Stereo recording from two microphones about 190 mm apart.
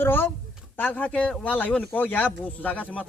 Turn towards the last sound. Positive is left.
turn(degrees=10)  # may be behind; listen again after turning